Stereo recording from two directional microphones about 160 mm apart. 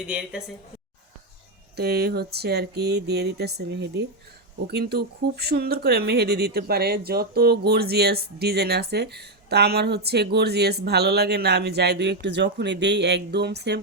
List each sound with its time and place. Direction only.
0.1 s a woman's voice: 5° right (ahead or behind)
1.7 s speech: 90° right